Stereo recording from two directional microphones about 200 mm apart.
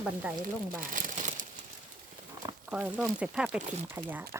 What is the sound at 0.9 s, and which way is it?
Crumpling, 40° right (ahead or behind).